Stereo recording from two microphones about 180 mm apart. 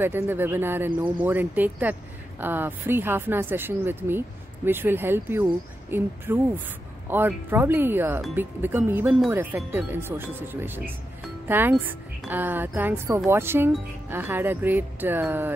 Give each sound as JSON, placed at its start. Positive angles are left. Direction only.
{"t": 0.0, "sound": "speech", "side_deg": -10}